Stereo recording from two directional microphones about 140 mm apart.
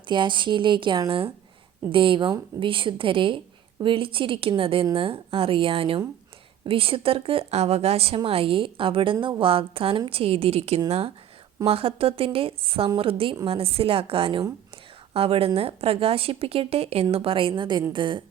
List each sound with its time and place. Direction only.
0.1 s a woman's voice: 35° right (ahead or behind)